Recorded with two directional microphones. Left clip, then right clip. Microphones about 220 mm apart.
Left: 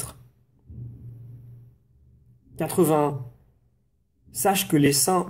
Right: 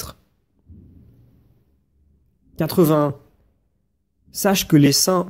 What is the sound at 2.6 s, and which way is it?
Speech, 40° right (ahead or behind).